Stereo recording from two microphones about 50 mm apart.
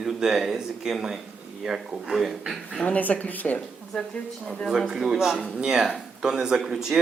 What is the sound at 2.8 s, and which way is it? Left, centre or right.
Speech, left.